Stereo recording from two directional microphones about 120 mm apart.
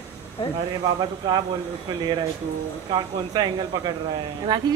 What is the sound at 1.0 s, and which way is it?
Speech, 40° right (ahead or behind).